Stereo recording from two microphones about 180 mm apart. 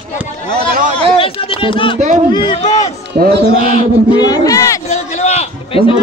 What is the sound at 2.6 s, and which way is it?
Speech, 35° left (ahead or behind).